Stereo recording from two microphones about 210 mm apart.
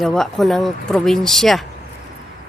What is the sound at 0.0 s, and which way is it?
Speech, centre (ahead or behind).